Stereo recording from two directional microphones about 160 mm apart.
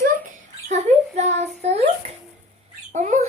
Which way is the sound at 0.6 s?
45° right (ahead or behind).